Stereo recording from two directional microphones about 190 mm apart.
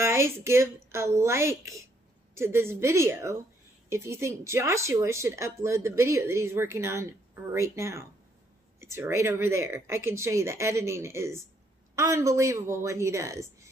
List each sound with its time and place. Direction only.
0.0 s speech: 15° right (ahead or behind)